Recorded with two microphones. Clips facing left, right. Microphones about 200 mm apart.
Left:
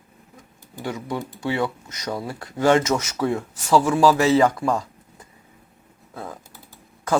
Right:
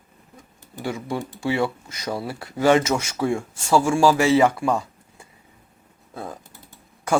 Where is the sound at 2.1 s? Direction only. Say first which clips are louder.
Right 1 dB; 10° right (ahead or behind).